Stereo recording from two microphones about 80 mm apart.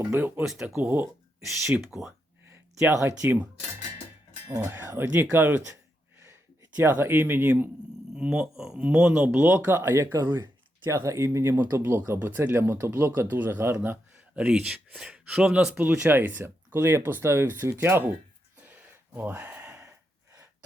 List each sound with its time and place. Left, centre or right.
0.0 s speech: right
0.4 s speech: centre
0.9 s speech: right
1.8 s speech: centre
2.0 s a sound: right
4.5 s speech: right
6.7 s speech: right
8.1 s speech: centre; by 11.5 s right
11.5 s speech: right
11.8 s speech: right
14.3 s speech: centre
15.9 s speech: right
19.1 s speech: right